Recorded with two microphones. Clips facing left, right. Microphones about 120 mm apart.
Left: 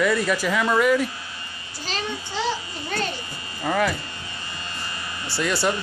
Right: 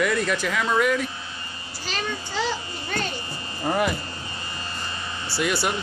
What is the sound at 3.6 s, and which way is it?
Speech, 20° right (ahead or behind).